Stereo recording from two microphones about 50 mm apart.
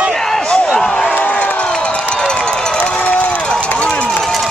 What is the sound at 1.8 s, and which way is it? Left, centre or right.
Run, left.